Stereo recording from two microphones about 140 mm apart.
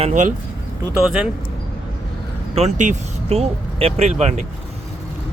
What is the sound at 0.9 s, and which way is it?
Speech, centre (ahead or behind).